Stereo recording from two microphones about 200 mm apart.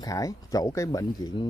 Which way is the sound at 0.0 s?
15° left (ahead or behind).